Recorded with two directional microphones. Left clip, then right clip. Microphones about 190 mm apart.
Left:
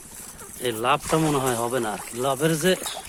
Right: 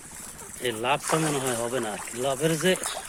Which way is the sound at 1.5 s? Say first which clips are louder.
Left 3 dB; 20° left (ahead or behind).